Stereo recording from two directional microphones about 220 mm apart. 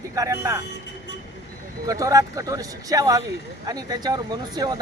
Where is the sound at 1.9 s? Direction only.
15° right (ahead or behind).